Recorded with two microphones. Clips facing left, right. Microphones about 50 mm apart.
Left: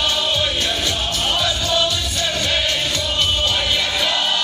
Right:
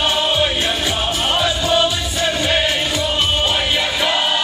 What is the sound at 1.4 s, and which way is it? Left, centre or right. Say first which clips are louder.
Music: right 5 dB; centre.